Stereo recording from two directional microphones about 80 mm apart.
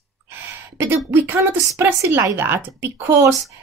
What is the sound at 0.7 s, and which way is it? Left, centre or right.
A woman's voice, right.